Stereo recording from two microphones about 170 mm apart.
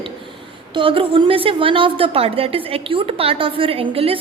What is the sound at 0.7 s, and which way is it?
A woman's voice, 30° right (ahead or behind).